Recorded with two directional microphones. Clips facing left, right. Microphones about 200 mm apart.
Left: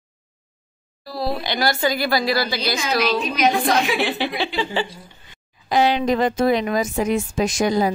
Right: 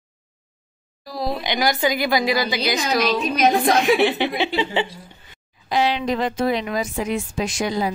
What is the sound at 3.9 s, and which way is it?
Speech, 20° right (ahead or behind).